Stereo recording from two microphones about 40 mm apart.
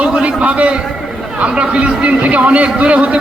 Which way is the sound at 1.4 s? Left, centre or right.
Right.